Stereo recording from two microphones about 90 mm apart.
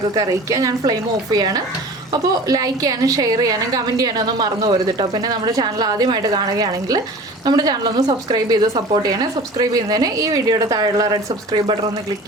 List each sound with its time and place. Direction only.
0.1 s a woman's voice: 45° right (ahead or behind)